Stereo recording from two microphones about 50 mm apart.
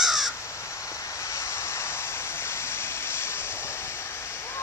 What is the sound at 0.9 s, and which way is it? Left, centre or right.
Vehicle, left.